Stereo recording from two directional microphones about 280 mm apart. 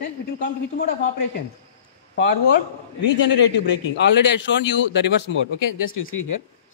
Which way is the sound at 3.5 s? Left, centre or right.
Left.